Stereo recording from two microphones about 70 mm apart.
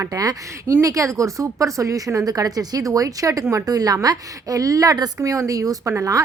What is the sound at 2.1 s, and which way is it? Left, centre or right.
Speech, right.